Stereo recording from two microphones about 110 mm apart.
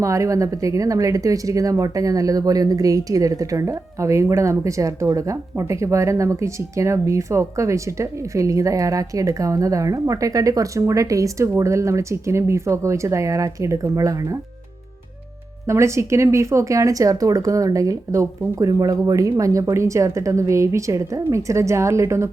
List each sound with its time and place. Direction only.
0.0 s speech: 30° right (ahead or behind)
15.6 s speech: 25° right (ahead or behind)